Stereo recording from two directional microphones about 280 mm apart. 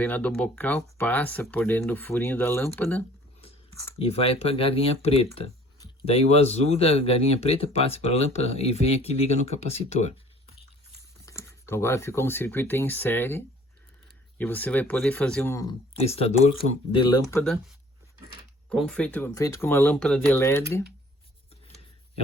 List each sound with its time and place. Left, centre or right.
0.0 s speech: centre
3.9 s speech: left
11.3 s speech: centre
16.0 s speech: left
18.7 s speech: centre